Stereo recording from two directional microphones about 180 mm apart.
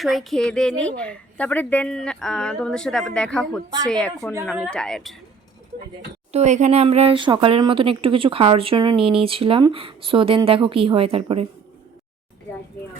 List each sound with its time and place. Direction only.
0.0 s a woman's voice: centre (ahead or behind)
6.3 s speech: 40° right (ahead or behind)